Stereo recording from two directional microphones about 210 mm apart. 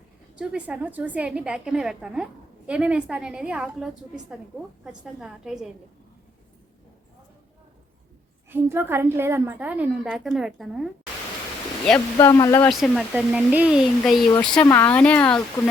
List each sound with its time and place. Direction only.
0.3 s a woman's voice: 5° right (ahead or behind)
8.4 s a woman's voice: 10° right (ahead or behind)
12.1 s speech: 15° left (ahead or behind)
12.6 s a woman's voice: centre (ahead or behind)
14.6 s speech: 15° left (ahead or behind)